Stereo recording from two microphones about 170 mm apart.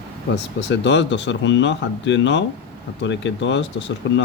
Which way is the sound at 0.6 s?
90° left.